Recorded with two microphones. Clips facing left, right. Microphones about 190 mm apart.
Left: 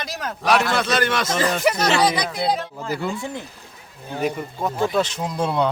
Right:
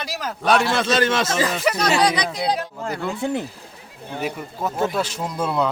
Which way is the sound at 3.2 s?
70° right (ahead or behind).